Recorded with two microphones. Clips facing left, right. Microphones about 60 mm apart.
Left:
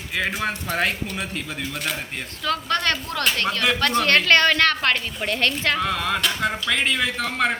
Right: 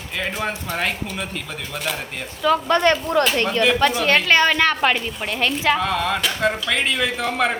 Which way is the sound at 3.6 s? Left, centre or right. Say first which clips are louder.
Right 1 dB; centre.